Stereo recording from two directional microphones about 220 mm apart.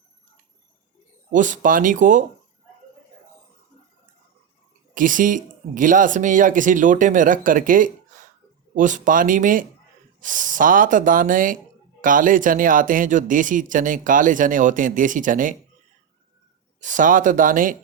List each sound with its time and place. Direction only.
1.3 s speech: 35° right (ahead or behind)
4.9 s speech: 35° right (ahead or behind)
16.8 s speech: 35° right (ahead or behind)